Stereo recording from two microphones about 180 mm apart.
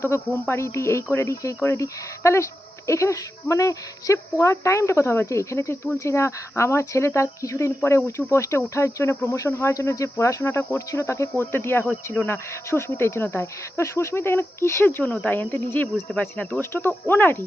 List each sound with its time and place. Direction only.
0.0 s speech: 15° left (ahead or behind)